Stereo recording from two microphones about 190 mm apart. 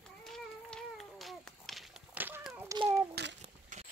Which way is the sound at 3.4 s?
35° right (ahead or behind).